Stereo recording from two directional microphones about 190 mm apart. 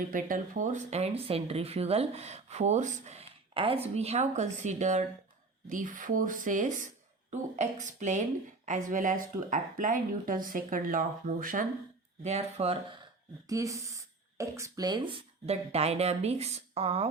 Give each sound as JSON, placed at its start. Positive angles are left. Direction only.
{"t": 0.0, "sound": "a woman's voice", "side_deg": -45}
{"t": 12.2, "sound": "speech", "side_deg": -35}
{"t": 13.5, "sound": "speech", "side_deg": -15}